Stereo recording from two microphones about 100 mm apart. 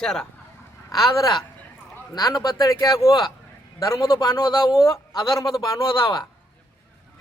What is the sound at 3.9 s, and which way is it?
Speech, 50° left (ahead or behind).